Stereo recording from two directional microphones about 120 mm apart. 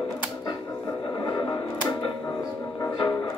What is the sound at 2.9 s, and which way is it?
Music, 40° left (ahead or behind).